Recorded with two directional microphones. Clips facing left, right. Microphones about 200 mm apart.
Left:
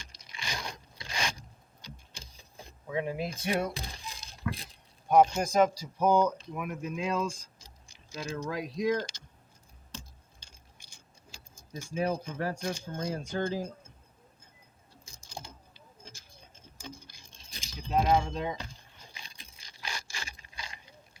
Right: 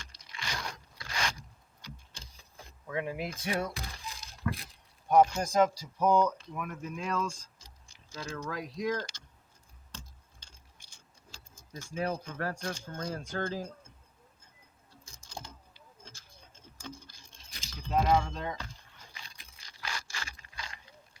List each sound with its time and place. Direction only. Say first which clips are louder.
0.0 s scrape: even; 15° left (ahead or behind)
2.6 s a sound: left 2 dB; 20° left (ahead or behind)
5.1 s speech: left 1 dB; 20° left (ahead or behind)
9.9 s typing: left 3 dB; 10° left (ahead or behind)
11.3 s speech: left 3 dB; 15° left (ahead or behind)
15.0 s typing: left 1 dB; 10° left (ahead or behind)
16.7 s patter: right 1 dB; 15° left (ahead or behind)
17.6 s a sound: left 1 dB; 15° left (ahead or behind)